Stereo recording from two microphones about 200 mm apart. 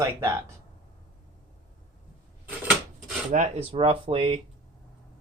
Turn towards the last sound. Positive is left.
turn(degrees=-25)  # may be behind; listen again after turning